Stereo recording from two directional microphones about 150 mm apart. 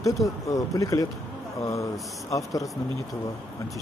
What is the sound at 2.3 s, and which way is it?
Speech, 20° left (ahead or behind).